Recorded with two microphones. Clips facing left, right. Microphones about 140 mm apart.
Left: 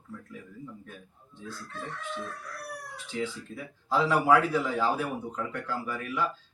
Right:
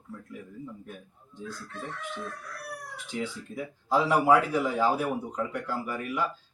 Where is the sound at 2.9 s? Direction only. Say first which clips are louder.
Left 1 dB; 15° right (ahead or behind).